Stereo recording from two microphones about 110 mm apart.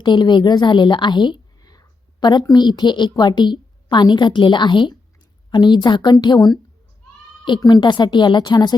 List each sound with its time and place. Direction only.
0.0 s a woman's voice: 40° left (ahead or behind)